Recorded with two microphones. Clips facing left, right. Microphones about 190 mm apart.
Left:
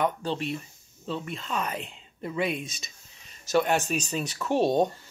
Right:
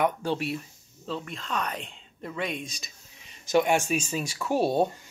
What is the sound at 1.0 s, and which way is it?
Speech, centre (ahead or behind).